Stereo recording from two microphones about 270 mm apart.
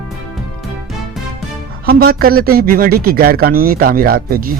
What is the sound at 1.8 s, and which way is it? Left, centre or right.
Speech, right.